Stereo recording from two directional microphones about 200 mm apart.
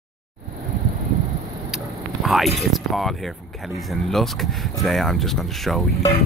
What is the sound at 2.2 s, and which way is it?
Speech, centre (ahead or behind).